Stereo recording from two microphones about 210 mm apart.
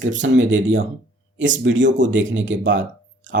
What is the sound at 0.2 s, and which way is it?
Speech, 60° right (ahead or behind).